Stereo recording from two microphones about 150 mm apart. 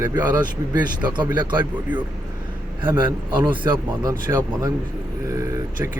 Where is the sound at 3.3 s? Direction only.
30° right (ahead or behind).